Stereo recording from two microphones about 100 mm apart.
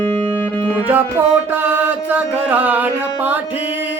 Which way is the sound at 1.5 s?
20° right (ahead or behind).